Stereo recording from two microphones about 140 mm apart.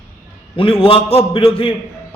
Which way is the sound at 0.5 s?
40° left (ahead or behind).